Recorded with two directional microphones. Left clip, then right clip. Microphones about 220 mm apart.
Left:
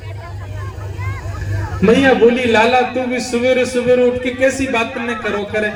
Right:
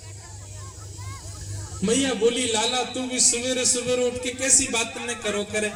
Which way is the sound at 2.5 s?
40° right (ahead or behind).